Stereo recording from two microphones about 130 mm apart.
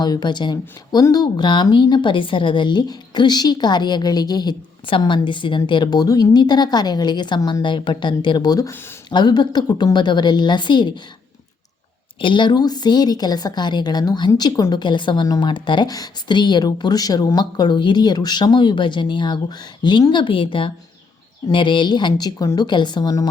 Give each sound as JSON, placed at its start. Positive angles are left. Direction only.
{"t": 0.0, "sound": "a woman's voice", "side_deg": 35}
{"t": 12.2, "sound": "a woman's voice", "side_deg": 40}